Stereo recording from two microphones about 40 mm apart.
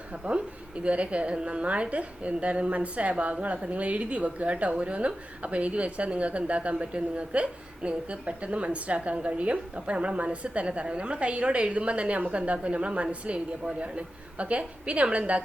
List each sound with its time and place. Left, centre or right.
0.9 s a woman's voice: right